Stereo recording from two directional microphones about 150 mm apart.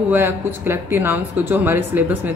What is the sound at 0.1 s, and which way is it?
A woman's voice, 15° right (ahead or behind).